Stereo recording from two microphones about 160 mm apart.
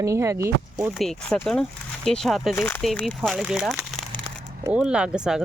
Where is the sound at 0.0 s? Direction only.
20° right (ahead or behind).